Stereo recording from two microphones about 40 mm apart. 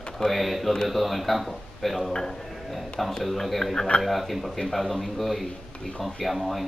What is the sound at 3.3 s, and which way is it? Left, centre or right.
Speech, centre.